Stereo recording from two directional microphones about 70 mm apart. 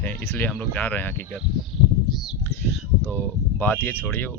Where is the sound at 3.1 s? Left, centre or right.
Left.